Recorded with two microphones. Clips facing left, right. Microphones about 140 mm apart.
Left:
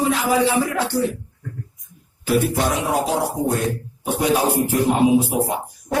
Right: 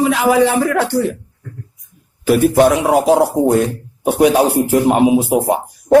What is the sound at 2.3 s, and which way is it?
Speech, 65° right (ahead or behind).